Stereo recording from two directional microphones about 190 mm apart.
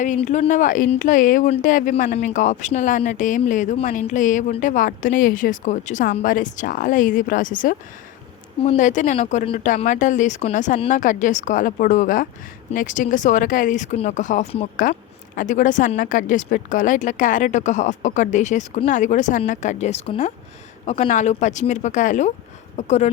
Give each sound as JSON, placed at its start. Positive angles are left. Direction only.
{"t": 0.0, "sound": "speech", "side_deg": 40}